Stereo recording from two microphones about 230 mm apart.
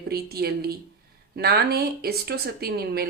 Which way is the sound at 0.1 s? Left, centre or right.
Right.